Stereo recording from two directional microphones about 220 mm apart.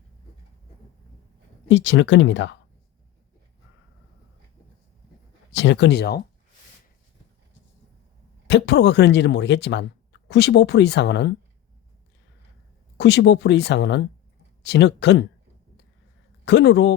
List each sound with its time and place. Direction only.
1.6 s speech: 55° left (ahead or behind)
5.5 s speech: 55° left (ahead or behind)
8.4 s speech: 50° left (ahead or behind)
13.0 s speech: 50° left (ahead or behind)
16.5 s speech: 50° left (ahead or behind)